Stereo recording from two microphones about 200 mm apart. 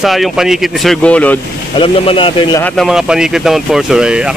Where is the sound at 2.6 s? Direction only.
Centre (ahead or behind).